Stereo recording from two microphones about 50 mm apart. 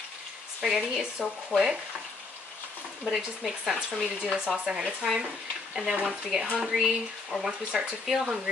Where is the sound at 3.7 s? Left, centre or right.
Centre.